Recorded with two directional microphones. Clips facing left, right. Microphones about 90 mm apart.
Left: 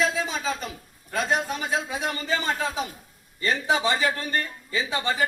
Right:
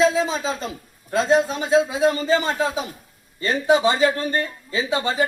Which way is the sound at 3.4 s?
20° right (ahead or behind).